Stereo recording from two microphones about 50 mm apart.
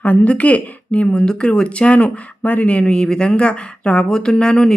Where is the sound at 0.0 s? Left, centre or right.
Left.